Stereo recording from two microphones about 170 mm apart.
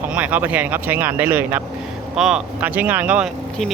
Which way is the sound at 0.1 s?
10° right (ahead or behind).